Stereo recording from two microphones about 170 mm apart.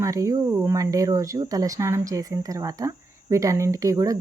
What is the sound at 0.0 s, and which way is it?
Speech, 20° right (ahead or behind).